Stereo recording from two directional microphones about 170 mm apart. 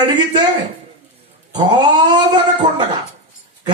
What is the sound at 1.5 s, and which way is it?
Speech, 25° right (ahead or behind).